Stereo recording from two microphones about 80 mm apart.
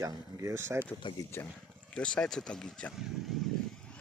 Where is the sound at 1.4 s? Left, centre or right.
Left.